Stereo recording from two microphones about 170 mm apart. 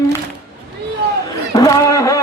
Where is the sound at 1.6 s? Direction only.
20° left (ahead or behind).